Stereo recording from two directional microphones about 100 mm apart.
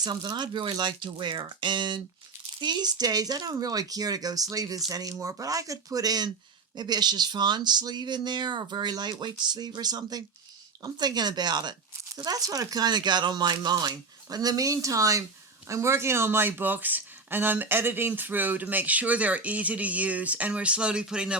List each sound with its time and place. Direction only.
0.0 s speech: 45° right (ahead or behind); by 21.3 s 10° right (ahead or behind)